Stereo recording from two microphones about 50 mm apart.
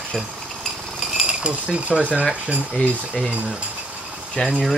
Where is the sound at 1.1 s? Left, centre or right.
Centre.